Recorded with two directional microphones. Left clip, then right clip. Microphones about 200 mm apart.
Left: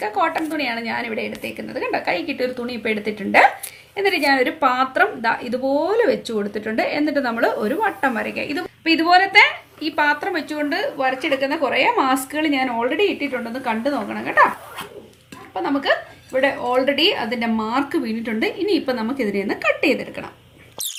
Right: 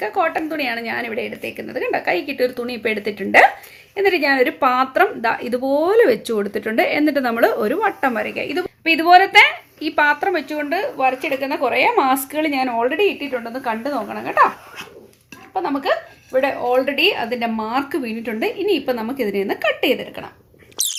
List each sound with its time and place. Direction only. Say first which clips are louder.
0.0 s speech: right 1 dB; 35° right (ahead or behind)
15.5 s speech: even; 25° right (ahead or behind)
20.8 s rodents: right 6 dB; 5° right (ahead or behind)